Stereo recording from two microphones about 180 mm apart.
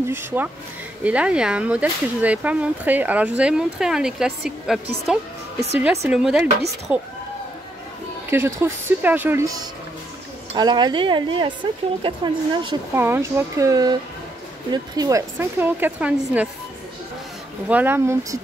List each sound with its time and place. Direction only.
0.1 s a woman's voice: 10° right (ahead or behind)
8.3 s speech: 15° right (ahead or behind)
12.9 s speech: 15° right (ahead or behind)
17.6 s speech: 10° right (ahead or behind)